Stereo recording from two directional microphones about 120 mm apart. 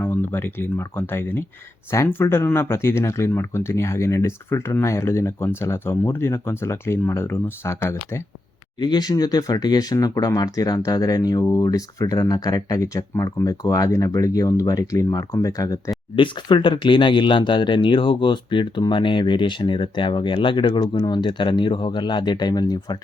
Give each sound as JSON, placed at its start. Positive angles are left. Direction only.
{"t": 0.0, "sound": "speech", "side_deg": 20}
{"t": 8.8, "sound": "speech", "side_deg": 35}
{"t": 16.1, "sound": "speech", "side_deg": 45}